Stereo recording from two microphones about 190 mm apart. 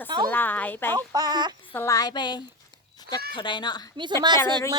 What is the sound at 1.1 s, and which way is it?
Speech, 20° right (ahead or behind).